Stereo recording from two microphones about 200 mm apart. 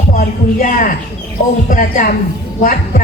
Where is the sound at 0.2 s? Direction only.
40° left (ahead or behind).